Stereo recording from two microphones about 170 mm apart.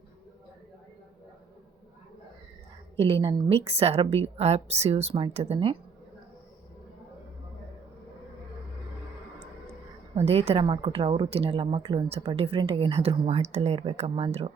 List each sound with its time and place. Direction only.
3.0 s a woman's voice: 35° right (ahead or behind)
10.2 s a woman's voice: 35° right (ahead or behind)